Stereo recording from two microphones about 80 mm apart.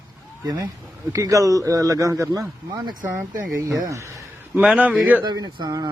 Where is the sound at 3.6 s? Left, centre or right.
Right.